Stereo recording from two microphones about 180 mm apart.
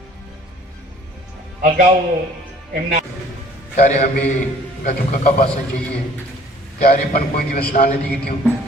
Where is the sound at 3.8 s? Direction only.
40° left (ahead or behind).